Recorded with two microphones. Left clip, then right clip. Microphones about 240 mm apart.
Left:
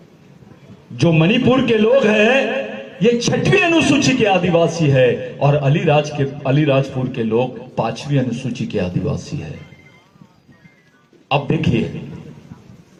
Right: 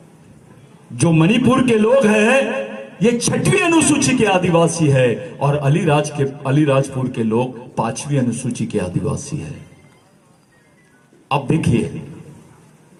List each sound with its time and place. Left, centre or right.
0.9 s a man's voice: right
11.3 s a man's voice: right